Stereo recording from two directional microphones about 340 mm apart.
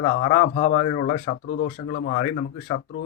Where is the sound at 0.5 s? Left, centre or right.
Left.